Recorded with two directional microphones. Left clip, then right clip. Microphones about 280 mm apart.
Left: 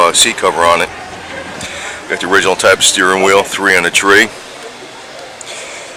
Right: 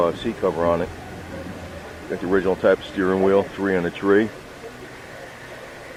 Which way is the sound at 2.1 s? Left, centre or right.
Centre.